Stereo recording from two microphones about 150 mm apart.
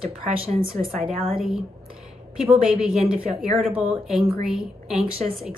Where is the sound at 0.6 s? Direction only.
70° right (ahead or behind).